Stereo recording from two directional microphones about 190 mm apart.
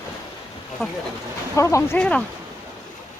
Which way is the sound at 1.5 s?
15° left (ahead or behind).